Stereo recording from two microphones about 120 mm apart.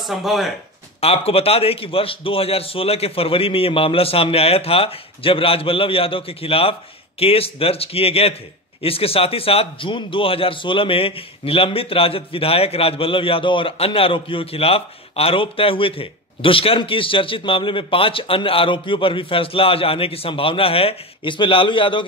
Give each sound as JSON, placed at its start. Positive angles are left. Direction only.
{"t": 0.0, "sound": "speech", "side_deg": 0}
{"t": 1.0, "sound": "a man's voice", "side_deg": 55}